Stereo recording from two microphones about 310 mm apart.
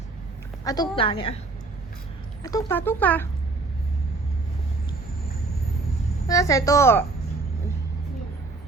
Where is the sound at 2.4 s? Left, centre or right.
Centre.